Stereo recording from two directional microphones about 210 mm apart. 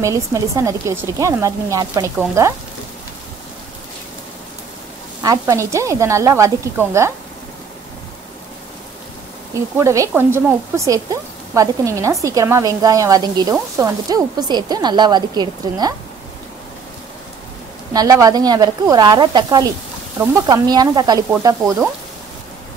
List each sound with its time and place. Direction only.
0.0 s speech: 15° right (ahead or behind)
5.2 s speech: 15° right (ahead or behind)
9.8 s speech: 15° right (ahead or behind)
17.9 s speech: 15° right (ahead or behind)